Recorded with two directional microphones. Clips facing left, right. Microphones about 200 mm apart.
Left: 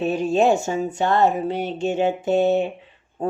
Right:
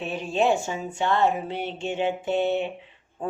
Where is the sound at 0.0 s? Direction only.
40° left (ahead or behind).